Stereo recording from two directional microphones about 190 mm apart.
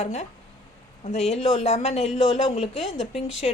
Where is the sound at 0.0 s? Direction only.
35° left (ahead or behind).